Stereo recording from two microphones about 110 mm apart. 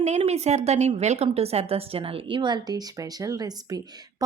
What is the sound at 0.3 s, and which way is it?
A woman's voice, 85° right.